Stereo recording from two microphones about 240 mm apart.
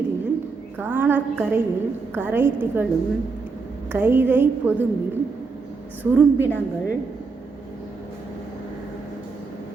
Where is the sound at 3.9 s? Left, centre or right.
Centre.